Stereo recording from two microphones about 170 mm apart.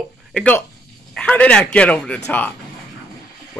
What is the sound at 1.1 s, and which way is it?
A man's voice, 5° left (ahead or behind).